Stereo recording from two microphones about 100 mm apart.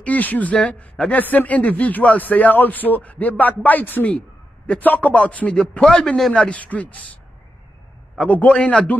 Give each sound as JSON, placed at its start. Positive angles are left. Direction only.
{"t": 0.0, "sound": "speech", "side_deg": 15}
{"t": 8.2, "sound": "speech", "side_deg": 15}